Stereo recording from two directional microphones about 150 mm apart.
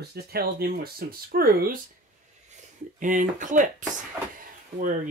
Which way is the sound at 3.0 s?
60° right (ahead or behind).